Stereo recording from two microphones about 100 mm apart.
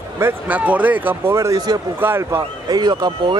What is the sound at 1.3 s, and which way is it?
Speech, 30° right (ahead or behind).